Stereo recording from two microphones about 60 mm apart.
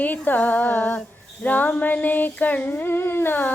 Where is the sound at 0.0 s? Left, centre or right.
Left.